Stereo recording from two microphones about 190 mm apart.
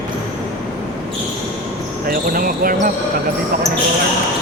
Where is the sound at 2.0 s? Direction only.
50° right (ahead or behind).